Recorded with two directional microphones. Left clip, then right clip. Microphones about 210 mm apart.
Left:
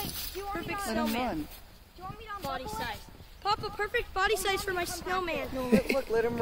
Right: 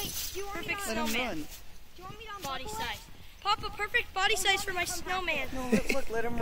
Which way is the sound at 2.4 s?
30° left (ahead or behind).